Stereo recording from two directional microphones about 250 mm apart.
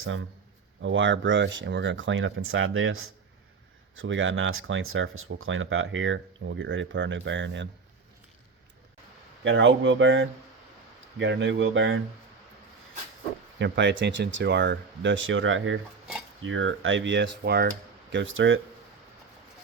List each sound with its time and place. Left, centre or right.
0.8 s speech: right
9.4 s speech: right
13.6 s speech: right